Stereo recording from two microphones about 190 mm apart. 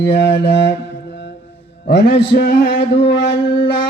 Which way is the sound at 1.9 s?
55° left (ahead or behind).